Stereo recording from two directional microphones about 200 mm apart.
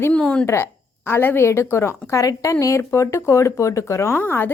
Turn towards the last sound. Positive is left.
turn(degrees=10)  # may be behind; listen again after turning